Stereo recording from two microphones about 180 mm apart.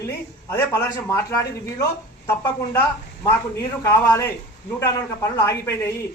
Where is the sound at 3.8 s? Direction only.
15° left (ahead or behind).